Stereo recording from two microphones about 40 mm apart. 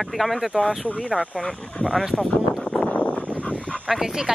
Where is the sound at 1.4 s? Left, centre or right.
Centre.